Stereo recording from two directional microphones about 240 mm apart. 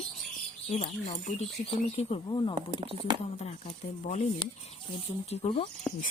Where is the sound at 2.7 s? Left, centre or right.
Right.